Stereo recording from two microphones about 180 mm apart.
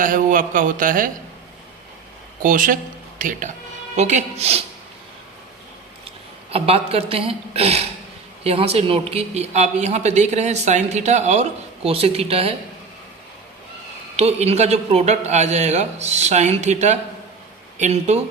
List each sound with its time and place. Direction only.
0.0 s a man's voice: 50° right (ahead or behind)
2.4 s a man's voice: 50° right (ahead or behind)
6.5 s speech: 35° right (ahead or behind)
14.2 s speech: 35° right (ahead or behind)